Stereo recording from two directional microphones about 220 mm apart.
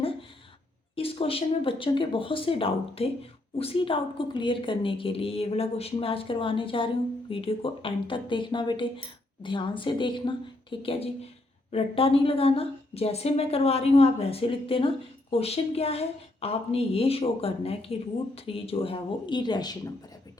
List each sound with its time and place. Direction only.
0.9 s a woman's voice: 25° left (ahead or behind)